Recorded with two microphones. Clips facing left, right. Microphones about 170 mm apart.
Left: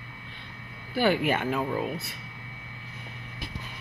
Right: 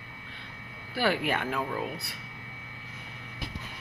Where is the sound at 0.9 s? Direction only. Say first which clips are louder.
Left 4 dB; centre (ahead or behind).